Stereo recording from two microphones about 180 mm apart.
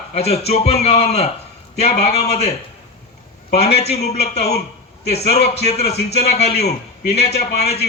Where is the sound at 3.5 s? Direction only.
35° left (ahead or behind).